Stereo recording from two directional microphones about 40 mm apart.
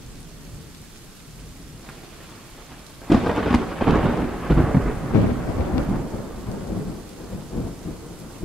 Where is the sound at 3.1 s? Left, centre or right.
Centre.